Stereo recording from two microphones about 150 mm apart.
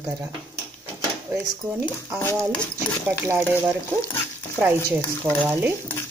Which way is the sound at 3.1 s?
15° right (ahead or behind).